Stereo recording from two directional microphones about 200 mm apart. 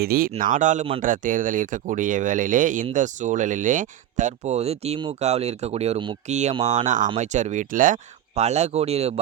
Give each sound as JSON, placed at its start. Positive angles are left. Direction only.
{"t": 0.0, "sound": "speech", "side_deg": -50}